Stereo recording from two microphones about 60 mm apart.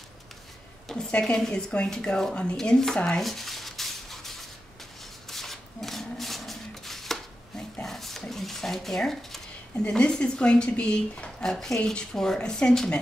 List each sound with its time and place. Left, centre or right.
0.8 s a woman's voice: centre
3.2 s a sound: centre
9.8 s speech: centre
11.5 s speech: centre